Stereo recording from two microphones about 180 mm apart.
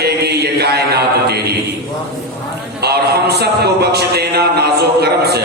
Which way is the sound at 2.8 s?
65° right (ahead or behind).